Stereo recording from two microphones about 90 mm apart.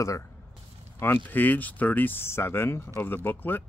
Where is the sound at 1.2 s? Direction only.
20° left (ahead or behind).